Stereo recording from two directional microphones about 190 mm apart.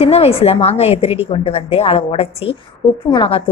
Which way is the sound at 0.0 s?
30° left (ahead or behind).